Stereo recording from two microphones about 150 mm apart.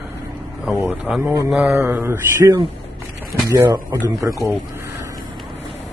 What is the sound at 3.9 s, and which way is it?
Speech, 15° right (ahead or behind).